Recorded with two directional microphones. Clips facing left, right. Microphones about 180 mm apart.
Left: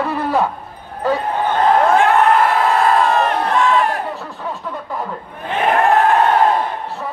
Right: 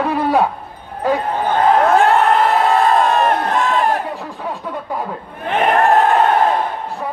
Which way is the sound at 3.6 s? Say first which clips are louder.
Left 2 dB; 40° right (ahead or behind).